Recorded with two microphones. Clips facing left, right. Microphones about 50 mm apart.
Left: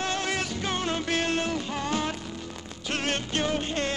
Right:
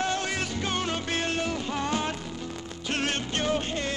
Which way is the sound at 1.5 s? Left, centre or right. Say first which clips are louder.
Even; right.